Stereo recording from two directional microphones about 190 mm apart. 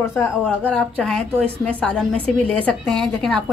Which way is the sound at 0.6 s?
5° left (ahead or behind).